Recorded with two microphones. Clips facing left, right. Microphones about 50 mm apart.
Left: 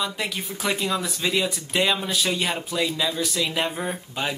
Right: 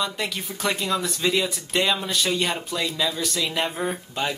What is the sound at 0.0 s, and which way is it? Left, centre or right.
Speech, centre.